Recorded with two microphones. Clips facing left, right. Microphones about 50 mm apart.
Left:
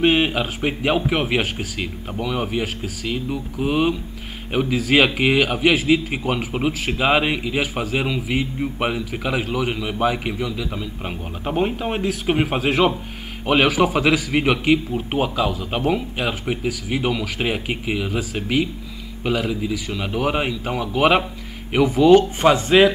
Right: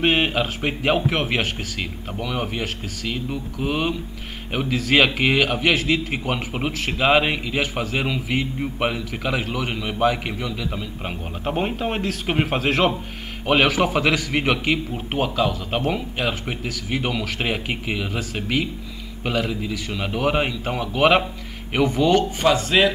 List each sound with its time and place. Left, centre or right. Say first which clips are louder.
0.0 s a man's voice: left 2 dB; centre
22.4 s speech: left 3 dB; left